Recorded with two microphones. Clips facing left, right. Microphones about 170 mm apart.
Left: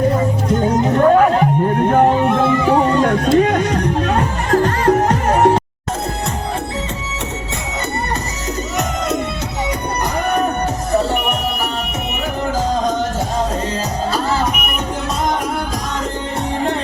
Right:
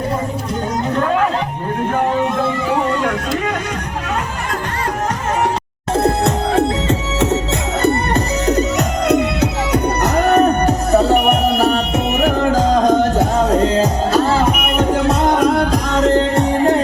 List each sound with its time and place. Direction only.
3.0 s a sound: 40° left (ahead or behind)
6.0 s music: 70° right (ahead or behind)
9.0 s music: 70° right (ahead or behind)
11.7 s music: 65° right (ahead or behind)
14.8 s music: 60° right (ahead or behind)